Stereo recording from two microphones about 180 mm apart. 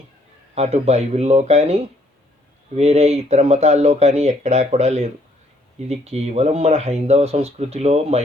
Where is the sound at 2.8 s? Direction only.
35° right (ahead or behind).